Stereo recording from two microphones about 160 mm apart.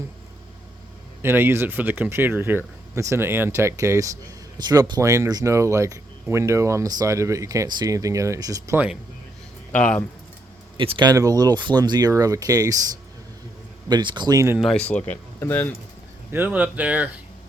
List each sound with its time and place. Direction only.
1.2 s speech: 15° right (ahead or behind)
9.7 s speech: 10° left (ahead or behind)
10.8 s speech: 30° right (ahead or behind)
13.8 s speech: 30° right (ahead or behind)
14.6 s speech: 5° left (ahead or behind)
16.3 s speech: 10° right (ahead or behind)